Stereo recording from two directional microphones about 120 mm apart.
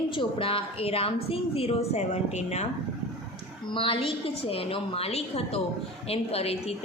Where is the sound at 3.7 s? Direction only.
45° left (ahead or behind).